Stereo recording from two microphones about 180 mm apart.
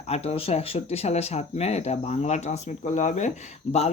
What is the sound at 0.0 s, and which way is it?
Speech, 35° left (ahead or behind).